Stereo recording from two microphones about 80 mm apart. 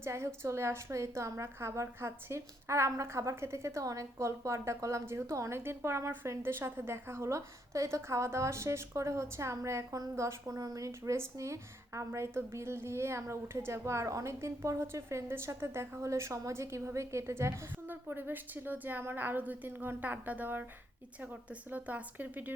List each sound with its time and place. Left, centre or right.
0.0 s speech: right
21.7 s a woman's voice: centre